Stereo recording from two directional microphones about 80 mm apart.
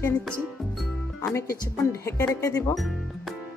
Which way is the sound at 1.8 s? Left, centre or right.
Left.